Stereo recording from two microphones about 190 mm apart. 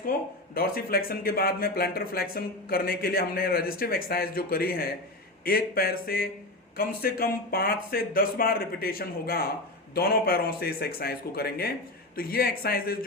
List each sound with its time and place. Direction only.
0.5 s speech: 50° left (ahead or behind)